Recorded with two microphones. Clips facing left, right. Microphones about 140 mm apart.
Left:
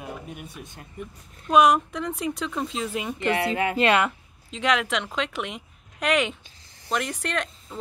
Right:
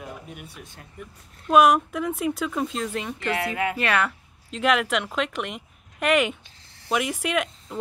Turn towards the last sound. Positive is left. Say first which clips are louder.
# right 4 dB
turn(degrees=-5)  # may be behind; listen again after turning